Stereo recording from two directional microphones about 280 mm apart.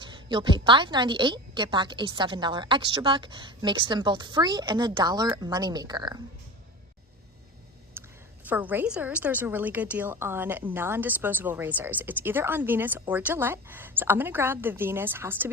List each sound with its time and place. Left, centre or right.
0.0 s a woman's voice: centre
8.0 s a sound: centre
8.4 s a woman's voice: centre